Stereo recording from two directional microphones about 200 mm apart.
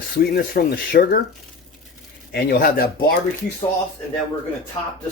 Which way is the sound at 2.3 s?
50° left (ahead or behind).